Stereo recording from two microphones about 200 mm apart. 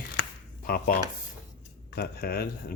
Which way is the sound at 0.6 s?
45° left (ahead or behind).